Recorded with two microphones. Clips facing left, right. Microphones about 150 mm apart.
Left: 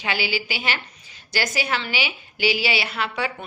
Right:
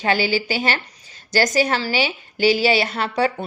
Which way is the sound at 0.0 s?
40° right (ahead or behind).